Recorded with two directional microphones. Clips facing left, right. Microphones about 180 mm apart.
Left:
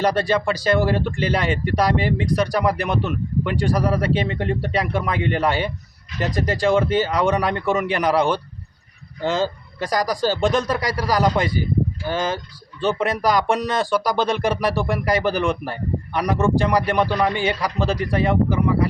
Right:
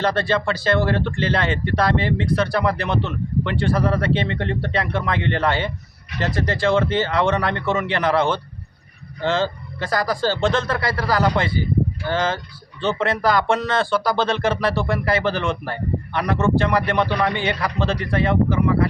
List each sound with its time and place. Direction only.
0.0 s speech: 15° left (ahead or behind)